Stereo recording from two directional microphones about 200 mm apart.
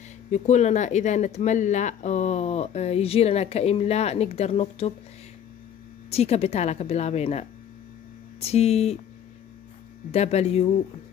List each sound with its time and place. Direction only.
0.3 s speech: 35° left (ahead or behind)
6.0 s speech: 30° left (ahead or behind)
10.1 s speech: 35° left (ahead or behind)